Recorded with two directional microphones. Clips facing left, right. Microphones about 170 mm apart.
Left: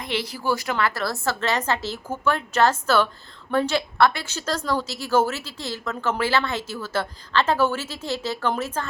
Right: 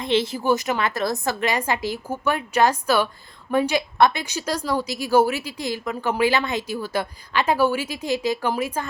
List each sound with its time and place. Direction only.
0.0 s a woman's voice: 25° right (ahead or behind)